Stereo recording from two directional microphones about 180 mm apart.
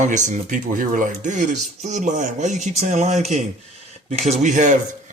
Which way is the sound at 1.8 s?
40° right (ahead or behind).